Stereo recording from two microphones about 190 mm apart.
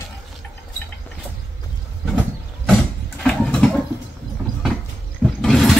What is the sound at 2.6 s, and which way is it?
Vehicle, 5° left (ahead or behind).